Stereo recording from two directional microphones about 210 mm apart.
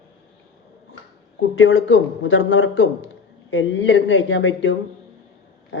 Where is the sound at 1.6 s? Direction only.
60° left (ahead or behind).